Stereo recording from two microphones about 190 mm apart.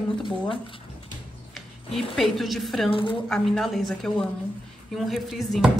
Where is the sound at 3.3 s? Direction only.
Centre (ahead or behind).